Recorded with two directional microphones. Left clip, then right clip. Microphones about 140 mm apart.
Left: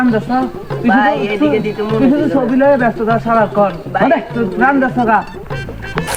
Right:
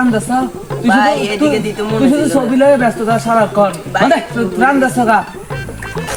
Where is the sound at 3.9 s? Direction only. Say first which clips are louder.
Right 1 dB; 20° right (ahead or behind).